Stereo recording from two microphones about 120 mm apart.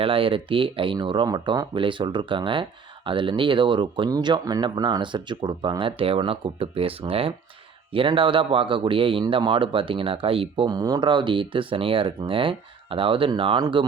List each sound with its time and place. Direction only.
0.0 s speech: 50° right (ahead or behind)
10.7 s speech: 35° right (ahead or behind)